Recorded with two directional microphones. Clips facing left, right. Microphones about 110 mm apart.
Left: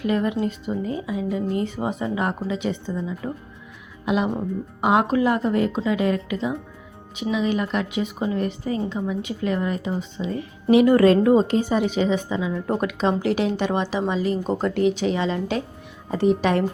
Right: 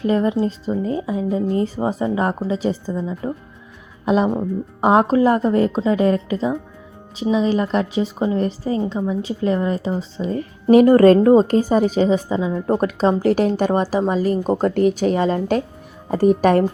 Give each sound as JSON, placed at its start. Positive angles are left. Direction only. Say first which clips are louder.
{"t": 0.0, "sound": "a woman's voice", "louder": "right 4 dB", "side_deg": -30}